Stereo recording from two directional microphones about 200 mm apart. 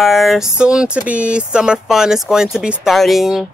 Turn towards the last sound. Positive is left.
turn(degrees=0)  # may be behind; listen again after turning